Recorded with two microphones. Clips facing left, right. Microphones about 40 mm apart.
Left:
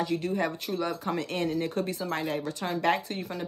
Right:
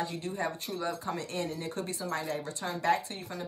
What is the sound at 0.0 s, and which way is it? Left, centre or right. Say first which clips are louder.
Speech: left 5 dB; left.